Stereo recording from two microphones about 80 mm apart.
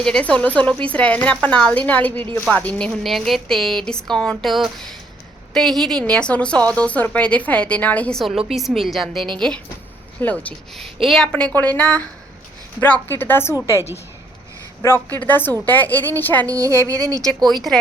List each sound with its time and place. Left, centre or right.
0.0 s a woman's voice: centre
3.0 s a woman's voice: centre
8.1 s a woman's voice: centre
10.2 s a woman's voice: left
10.8 s speech: centre
11.3 s a woman's voice: centre
14.8 s a woman's voice: left
16.5 s speech: right
17.5 s speech: centre